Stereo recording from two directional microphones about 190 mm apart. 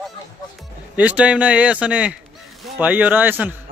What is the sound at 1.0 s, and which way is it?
Speech, 5° right (ahead or behind).